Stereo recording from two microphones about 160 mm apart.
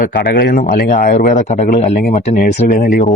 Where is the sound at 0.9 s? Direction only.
55° left (ahead or behind).